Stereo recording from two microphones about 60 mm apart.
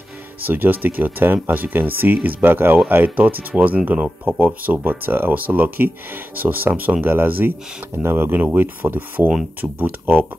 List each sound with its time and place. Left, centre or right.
0.4 s speech: right